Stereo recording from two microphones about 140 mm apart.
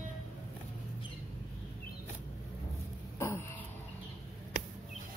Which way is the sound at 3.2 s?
20° left (ahead or behind).